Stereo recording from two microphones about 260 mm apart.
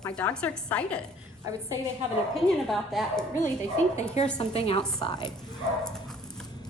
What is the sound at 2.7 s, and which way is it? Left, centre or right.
Speech, centre.